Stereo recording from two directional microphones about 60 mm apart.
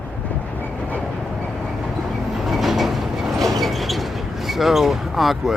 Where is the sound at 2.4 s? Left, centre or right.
Centre.